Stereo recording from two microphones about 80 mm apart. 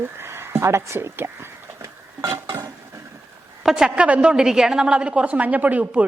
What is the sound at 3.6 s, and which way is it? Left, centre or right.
A woman's voice, centre.